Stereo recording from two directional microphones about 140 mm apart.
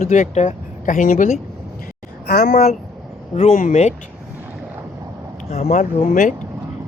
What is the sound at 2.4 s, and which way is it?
Speech, 55° left (ahead or behind).